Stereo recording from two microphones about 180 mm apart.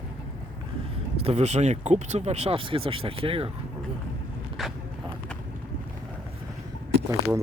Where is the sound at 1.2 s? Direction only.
35° right (ahead or behind).